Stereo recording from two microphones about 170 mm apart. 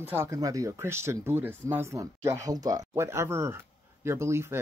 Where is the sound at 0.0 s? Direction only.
15° right (ahead or behind).